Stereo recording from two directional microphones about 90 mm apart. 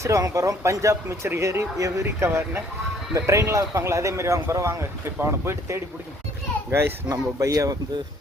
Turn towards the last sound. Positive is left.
turn(degrees=-40)  # may be behind; listen again after turning